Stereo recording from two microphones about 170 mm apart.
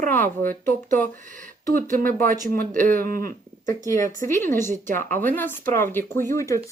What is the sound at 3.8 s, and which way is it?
Speech, 20° left (ahead or behind).